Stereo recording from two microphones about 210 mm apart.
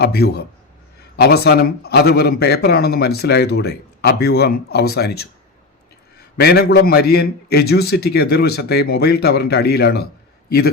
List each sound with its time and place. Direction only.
0.0 s a man's voice: 50° left (ahead or behind)